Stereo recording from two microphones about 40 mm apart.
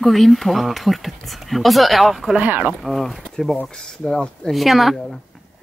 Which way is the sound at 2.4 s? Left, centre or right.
Right.